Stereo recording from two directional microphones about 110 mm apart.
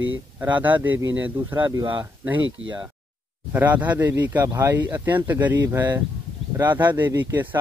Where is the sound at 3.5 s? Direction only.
15° right (ahead or behind).